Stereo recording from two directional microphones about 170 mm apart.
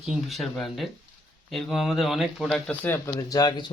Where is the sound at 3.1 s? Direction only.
20° left (ahead or behind).